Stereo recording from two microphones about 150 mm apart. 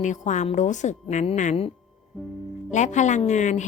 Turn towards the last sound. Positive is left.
turn(degrees=55)  # may be behind; listen again after turning